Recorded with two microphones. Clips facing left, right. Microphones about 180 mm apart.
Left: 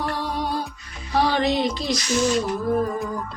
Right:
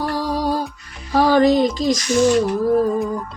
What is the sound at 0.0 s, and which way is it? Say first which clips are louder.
Music: right 5 dB; 40° right (ahead or behind).